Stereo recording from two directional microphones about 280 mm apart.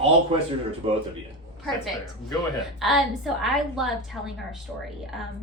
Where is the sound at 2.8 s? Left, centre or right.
Centre.